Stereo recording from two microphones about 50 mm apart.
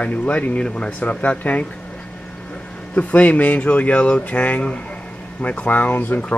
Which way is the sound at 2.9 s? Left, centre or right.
Left.